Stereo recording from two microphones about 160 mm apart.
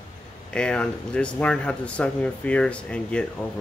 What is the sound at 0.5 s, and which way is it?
Speech, 5° left (ahead or behind).